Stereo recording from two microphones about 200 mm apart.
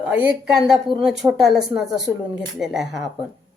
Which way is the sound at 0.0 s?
5° right (ahead or behind).